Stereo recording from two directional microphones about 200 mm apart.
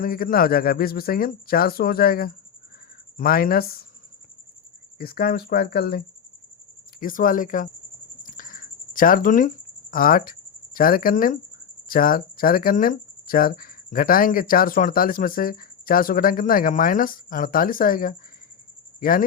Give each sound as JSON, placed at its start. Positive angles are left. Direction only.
{"t": 0.0, "sound": "speech", "side_deg": 45}
{"t": 4.9, "sound": "speech", "side_deg": 50}
{"t": 7.0, "sound": "speech", "side_deg": 45}
{"t": 8.2, "sound": "a sound", "side_deg": 40}
{"t": 9.9, "sound": "speech", "side_deg": 45}